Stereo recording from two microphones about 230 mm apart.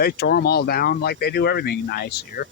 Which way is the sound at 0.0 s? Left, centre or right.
Left.